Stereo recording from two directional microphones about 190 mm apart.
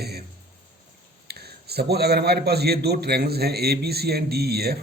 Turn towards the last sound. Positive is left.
turn(degrees=-55)  # may be behind; listen again after turning